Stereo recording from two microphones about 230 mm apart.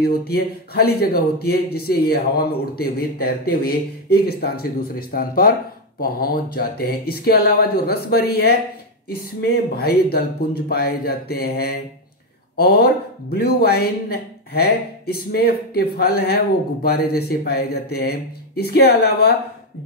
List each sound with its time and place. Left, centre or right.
0.0 s speech: left